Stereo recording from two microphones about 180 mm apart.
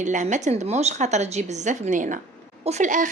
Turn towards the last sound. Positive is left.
turn(degrees=-45)  # may be behind; listen again after turning